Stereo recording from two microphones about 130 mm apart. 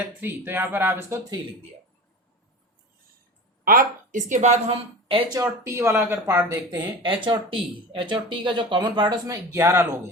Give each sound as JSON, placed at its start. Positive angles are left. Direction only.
{"t": 0.2, "sound": "speech", "side_deg": -15}
{"t": 3.6, "sound": "a woman's voice", "side_deg": -90}
{"t": 5.3, "sound": "speech", "side_deg": -25}